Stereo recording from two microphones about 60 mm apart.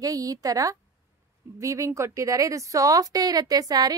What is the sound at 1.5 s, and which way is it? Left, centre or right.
A woman's voice, right.